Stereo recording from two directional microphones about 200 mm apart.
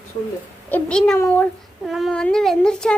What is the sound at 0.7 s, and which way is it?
Speech, 5° left (ahead or behind).